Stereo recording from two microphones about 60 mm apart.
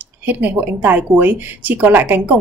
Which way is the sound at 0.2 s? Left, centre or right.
Right.